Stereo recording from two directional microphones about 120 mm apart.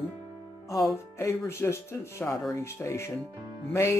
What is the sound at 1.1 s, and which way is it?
Speech, 25° left (ahead or behind).